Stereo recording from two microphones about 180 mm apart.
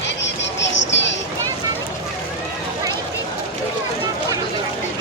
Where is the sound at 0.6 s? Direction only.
85° left.